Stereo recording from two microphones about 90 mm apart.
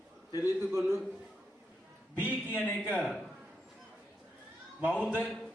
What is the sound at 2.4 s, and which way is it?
Speech, 25° left (ahead or behind).